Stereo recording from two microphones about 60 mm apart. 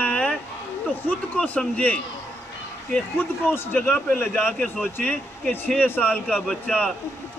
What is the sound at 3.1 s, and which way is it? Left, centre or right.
Speech, left.